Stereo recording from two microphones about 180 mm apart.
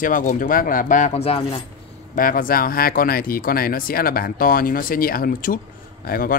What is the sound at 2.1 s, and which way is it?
Speech, 50° left (ahead or behind).